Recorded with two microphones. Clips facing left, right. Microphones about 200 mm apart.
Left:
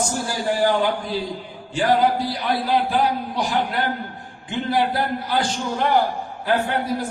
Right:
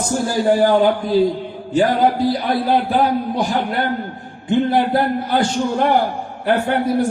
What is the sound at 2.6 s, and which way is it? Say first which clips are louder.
A man's voice: right 3 dB; 55° right (ahead or behind).